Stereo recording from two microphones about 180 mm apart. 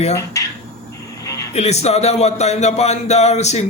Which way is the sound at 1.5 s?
35° left (ahead or behind).